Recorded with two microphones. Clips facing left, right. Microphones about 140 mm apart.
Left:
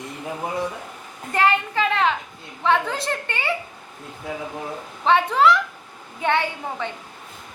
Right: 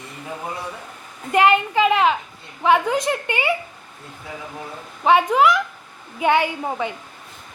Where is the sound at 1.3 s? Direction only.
15° right (ahead or behind).